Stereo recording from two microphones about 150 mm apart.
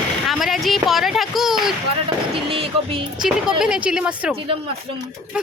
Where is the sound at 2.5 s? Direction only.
40° right (ahead or behind).